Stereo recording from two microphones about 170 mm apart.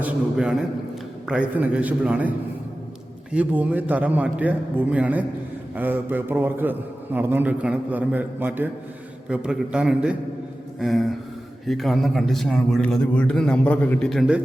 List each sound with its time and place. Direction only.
0.0 s a man's voice: 5° right (ahead or behind)
3.3 s a man's voice: 10° right (ahead or behind)
10.8 s a sound: centre (ahead or behind)
11.6 s a man's voice: centre (ahead or behind)